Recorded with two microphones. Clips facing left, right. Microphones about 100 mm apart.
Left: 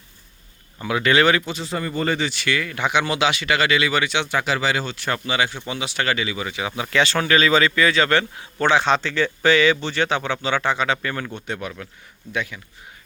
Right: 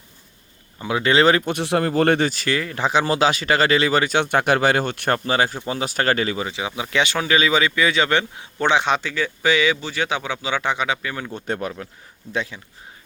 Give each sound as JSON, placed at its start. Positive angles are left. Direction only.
{"t": 0.8, "sound": "speech", "side_deg": -25}
{"t": 1.5, "sound": "speech", "side_deg": -65}
{"t": 2.1, "sound": "speech", "side_deg": -45}
{"t": 6.4, "sound": "a man's voice", "side_deg": -20}
{"t": 11.3, "sound": "speech", "side_deg": -40}